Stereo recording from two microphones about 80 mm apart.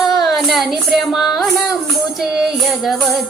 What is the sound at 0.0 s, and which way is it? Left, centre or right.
Child singing, centre.